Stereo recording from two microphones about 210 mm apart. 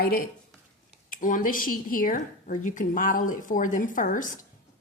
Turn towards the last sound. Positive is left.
turn(degrees=40)  # may be behind; listen again after turning